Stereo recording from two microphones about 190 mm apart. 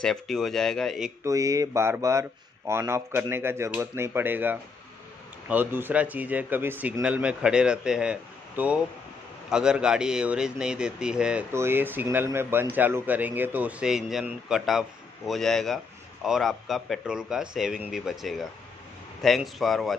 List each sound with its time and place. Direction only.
0.0 s speech: centre (ahead or behind)
1.2 s speech: 15° right (ahead or behind); by 20.0 s centre (ahead or behind)